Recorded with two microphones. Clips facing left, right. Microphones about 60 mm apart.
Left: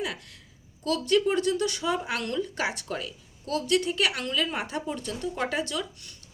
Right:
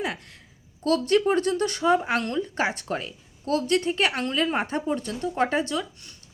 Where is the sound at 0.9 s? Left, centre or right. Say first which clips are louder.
Right 3 dB; right.